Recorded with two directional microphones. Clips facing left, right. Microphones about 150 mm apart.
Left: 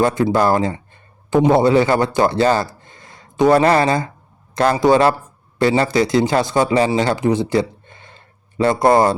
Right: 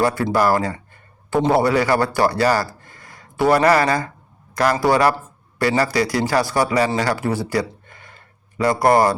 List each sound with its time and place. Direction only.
0.0 s speech: 20° left (ahead or behind)